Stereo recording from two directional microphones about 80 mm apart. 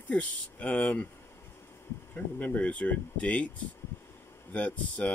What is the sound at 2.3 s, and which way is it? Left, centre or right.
Speech, left.